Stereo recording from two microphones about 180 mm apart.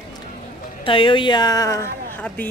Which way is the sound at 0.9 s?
30° left (ahead or behind).